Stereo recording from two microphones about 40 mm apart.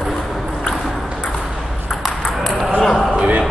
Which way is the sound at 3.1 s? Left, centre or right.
Right.